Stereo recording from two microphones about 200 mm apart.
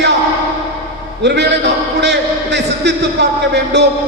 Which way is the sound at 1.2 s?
55° right (ahead or behind).